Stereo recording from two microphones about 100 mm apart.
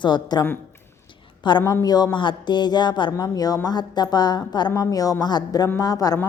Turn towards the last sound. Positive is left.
turn(degrees=40)  # may be behind; listen again after turning